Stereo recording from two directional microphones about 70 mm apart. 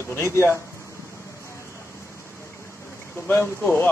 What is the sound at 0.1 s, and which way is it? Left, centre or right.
Speech, left.